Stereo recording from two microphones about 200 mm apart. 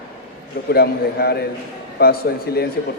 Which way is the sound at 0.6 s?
55° left (ahead or behind).